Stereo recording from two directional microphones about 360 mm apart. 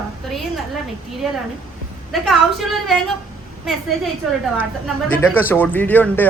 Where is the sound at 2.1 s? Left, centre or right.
Centre.